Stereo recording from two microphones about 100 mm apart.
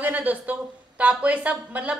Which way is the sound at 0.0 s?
15° right (ahead or behind).